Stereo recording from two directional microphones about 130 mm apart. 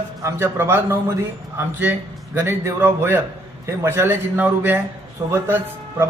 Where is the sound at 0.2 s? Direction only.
20° right (ahead or behind).